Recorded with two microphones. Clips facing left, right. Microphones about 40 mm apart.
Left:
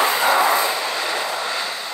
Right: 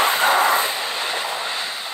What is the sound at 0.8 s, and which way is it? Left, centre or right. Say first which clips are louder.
Train: left 2 dB; right.